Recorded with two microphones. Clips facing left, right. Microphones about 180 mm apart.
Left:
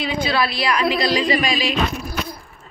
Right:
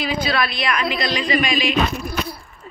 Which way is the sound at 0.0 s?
25° left (ahead or behind).